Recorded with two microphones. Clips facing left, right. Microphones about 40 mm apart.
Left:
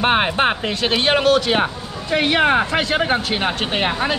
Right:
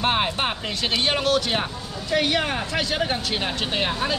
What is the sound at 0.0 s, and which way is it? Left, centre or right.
Speech, left.